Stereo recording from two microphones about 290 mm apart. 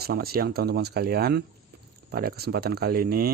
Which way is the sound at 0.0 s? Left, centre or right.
Right.